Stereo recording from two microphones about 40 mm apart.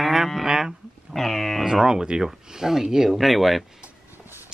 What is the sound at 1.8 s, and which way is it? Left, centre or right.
Speech, centre.